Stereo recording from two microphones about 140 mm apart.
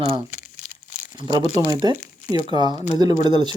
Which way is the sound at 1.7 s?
25° right (ahead or behind).